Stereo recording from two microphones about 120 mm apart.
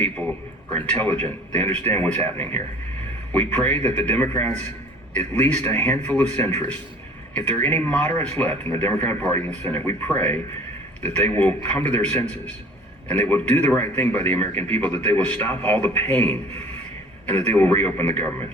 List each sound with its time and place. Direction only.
0.9 s a man's voice: 15° left (ahead or behind)
13.1 s a man's voice: 15° left (ahead or behind)